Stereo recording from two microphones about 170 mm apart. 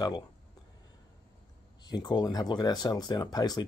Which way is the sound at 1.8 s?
25° left (ahead or behind).